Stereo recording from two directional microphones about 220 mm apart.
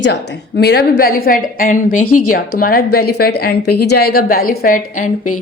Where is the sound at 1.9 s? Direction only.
85° left.